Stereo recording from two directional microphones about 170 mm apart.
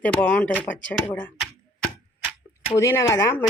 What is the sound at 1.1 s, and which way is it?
Tick-tock, 5° left (ahead or behind).